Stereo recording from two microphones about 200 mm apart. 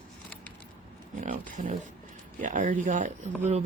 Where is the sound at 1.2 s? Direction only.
40° right (ahead or behind).